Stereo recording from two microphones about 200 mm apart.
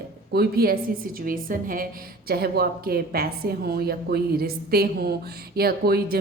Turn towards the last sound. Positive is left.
turn(degrees=-50)  # may be behind; listen again after turning